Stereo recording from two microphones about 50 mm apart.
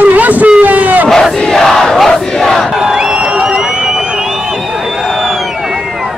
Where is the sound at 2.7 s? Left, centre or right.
Centre.